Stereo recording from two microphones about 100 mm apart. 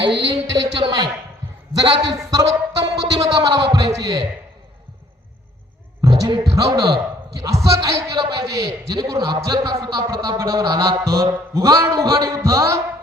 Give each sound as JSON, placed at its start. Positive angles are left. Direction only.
{"t": 0.5, "sound": "a man's voice", "side_deg": -40}
{"t": 3.9, "sound": "a man's voice", "side_deg": -35}
{"t": 6.0, "sound": "music", "side_deg": -35}
{"t": 6.6, "sound": "a man's voice", "side_deg": -35}